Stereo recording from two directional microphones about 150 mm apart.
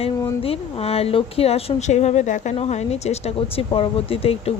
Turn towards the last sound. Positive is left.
turn(degrees=40)  # may be behind; listen again after turning